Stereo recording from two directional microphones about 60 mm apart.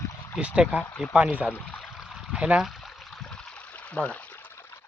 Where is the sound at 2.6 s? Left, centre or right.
Centre; by 4.5 s left.